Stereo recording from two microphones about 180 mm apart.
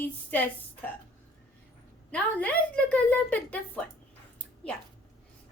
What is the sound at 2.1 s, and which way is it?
A woman's voice, 10° left (ahead or behind).